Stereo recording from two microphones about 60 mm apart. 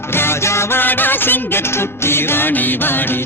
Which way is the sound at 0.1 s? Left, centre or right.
Left.